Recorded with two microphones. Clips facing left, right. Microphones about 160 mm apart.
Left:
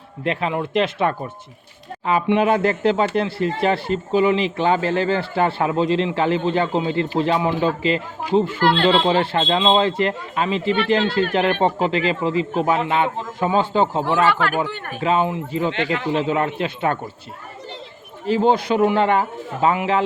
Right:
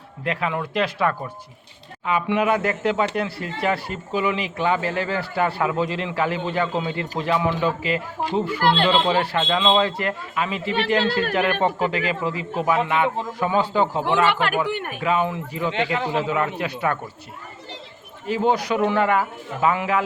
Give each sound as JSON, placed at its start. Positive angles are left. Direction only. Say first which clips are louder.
{"t": 0.3, "sound": "speech", "louder": "left 3 dB", "side_deg": 25}
{"t": 14.3, "sound": "speech", "louder": "left 2 dB", "side_deg": -20}
{"t": 15.0, "sound": "speech", "louder": "left 3 dB", "side_deg": 25}
{"t": 15.7, "sound": "speech", "louder": "left 1 dB", "side_deg": -30}
{"t": 16.1, "sound": "speech", "louder": "left 4 dB", "side_deg": 30}
{"t": 18.3, "sound": "speech", "louder": "left 4 dB", "side_deg": 30}